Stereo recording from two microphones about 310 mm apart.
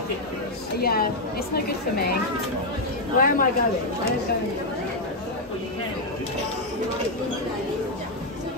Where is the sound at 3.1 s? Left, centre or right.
Left.